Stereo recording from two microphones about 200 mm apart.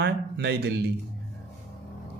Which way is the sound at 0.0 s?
55° right (ahead or behind).